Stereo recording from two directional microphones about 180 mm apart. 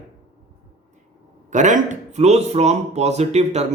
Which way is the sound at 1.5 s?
45° right (ahead or behind).